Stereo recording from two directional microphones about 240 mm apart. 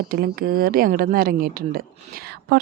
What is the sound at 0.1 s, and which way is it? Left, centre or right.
A woman's voice, right.